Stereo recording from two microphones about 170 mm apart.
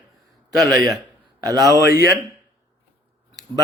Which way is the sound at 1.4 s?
20° right (ahead or behind).